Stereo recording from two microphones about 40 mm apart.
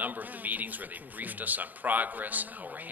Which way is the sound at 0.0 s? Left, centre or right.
Right.